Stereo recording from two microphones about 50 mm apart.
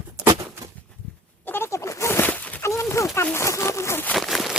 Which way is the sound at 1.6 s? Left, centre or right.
Left.